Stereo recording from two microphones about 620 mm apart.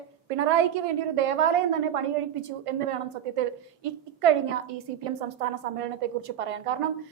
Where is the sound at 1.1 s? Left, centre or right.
Right.